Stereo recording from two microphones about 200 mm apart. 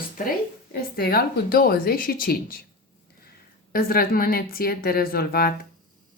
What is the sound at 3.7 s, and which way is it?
Speech, 45° left (ahead or behind).